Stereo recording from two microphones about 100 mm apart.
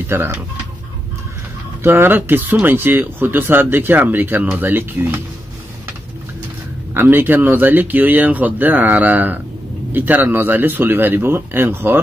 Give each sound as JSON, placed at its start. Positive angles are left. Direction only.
{"t": 0.1, "sound": "speech", "side_deg": -25}
{"t": 1.8, "sound": "speech", "side_deg": -20}
{"t": 6.9, "sound": "speech", "side_deg": -20}